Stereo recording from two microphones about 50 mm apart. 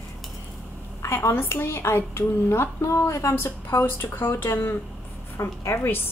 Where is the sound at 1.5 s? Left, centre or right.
Left.